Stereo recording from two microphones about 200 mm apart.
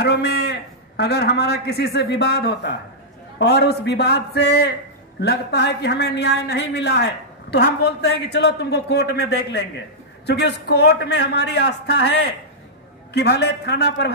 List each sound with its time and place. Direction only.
0.0 s a man's voice: 55° left (ahead or behind)